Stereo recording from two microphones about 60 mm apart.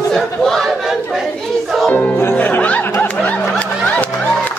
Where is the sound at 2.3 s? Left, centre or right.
Left.